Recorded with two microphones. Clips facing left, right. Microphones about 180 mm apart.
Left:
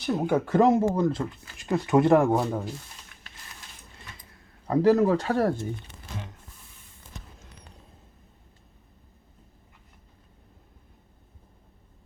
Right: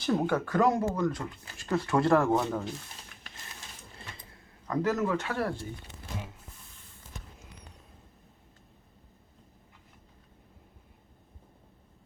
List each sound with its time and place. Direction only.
0.0 s speech: 5° left (ahead or behind)
0.3 s speech: 25° left (ahead or behind)
4.6 s speech: 35° left (ahead or behind)